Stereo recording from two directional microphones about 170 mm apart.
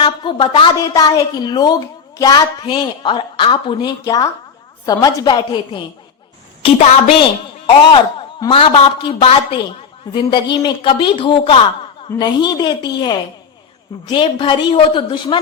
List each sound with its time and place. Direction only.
0.0 s a woman's voice: 30° left (ahead or behind)
0.8 s a woman's voice: 20° left (ahead or behind)
6.6 s a woman's voice: 35° left (ahead or behind)
14.1 s a woman's voice: 30° left (ahead or behind)